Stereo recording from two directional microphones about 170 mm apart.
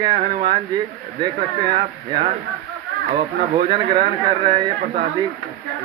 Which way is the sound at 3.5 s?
25° right (ahead or behind).